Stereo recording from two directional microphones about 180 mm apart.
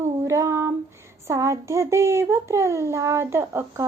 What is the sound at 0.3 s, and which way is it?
Child singing, 15° right (ahead or behind).